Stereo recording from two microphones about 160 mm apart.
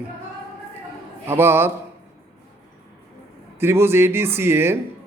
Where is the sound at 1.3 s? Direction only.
15° right (ahead or behind).